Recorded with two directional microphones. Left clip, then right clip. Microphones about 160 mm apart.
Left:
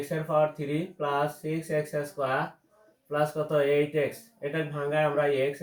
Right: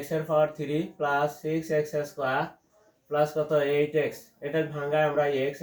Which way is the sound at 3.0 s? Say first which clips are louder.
Right 2 dB; 20° left (ahead or behind).